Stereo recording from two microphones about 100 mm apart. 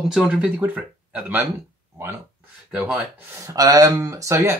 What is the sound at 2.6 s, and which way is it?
Speech, 10° right (ahead or behind).